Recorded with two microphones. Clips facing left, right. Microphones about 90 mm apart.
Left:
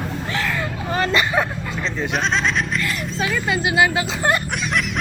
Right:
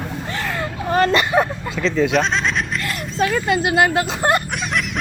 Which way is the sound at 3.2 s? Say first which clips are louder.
Right 4 dB; 50° right (ahead or behind).